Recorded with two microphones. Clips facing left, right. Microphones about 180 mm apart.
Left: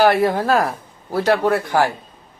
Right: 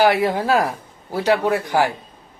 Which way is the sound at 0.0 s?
15° right (ahead or behind).